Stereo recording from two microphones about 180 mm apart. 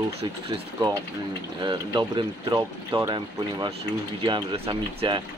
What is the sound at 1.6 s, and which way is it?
Speech, 25° right (ahead or behind).